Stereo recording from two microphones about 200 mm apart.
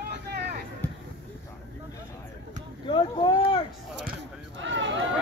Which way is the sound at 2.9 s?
25° left (ahead or behind).